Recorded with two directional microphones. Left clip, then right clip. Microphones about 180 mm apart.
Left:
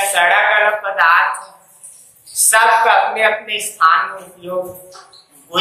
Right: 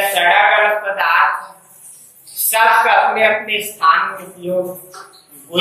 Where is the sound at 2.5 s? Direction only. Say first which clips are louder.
Even; 20° left (ahead or behind).